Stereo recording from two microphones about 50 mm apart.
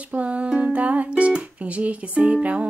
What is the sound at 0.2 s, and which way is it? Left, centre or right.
Music, right.